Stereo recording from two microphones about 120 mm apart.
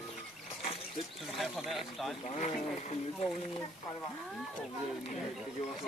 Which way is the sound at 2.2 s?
80° left.